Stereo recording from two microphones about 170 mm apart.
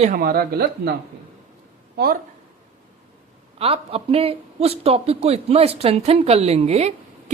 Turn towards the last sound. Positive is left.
turn(degrees=-40)  # may be behind; listen again after turning